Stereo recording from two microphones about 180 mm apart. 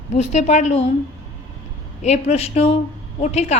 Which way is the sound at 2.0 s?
40° left (ahead or behind).